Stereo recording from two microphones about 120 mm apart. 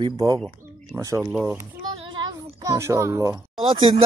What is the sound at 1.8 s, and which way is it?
Child singing, 40° right (ahead or behind).